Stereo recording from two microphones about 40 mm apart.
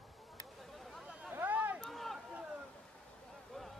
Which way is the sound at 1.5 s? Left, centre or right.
Right.